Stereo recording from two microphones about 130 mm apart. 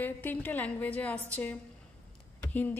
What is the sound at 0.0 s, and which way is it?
A woman's voice, 15° left (ahead or behind).